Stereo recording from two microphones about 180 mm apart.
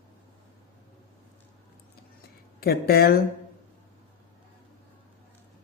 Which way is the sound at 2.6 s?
60° left (ahead or behind).